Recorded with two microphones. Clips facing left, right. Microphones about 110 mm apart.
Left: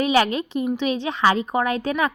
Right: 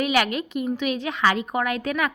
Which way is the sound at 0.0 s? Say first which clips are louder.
Left 3 dB; 30° left (ahead or behind).